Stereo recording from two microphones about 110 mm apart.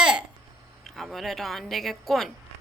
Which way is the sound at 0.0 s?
5° right (ahead or behind).